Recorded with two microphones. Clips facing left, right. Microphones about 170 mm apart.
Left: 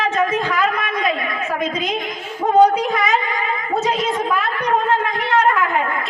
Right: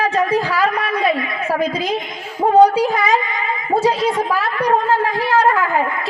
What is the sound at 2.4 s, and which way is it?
Speech, 30° right (ahead or behind).